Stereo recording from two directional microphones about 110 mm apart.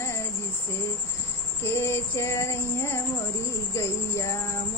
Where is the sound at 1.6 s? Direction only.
25° left (ahead or behind).